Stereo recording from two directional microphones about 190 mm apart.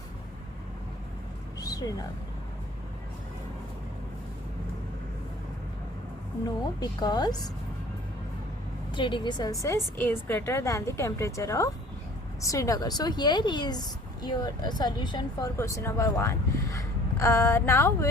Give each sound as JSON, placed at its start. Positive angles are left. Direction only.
{"t": 1.6, "sound": "a sound", "side_deg": 20}
{"t": 6.4, "sound": "a woman's voice", "side_deg": 20}
{"t": 9.0, "sound": "speech", "side_deg": 25}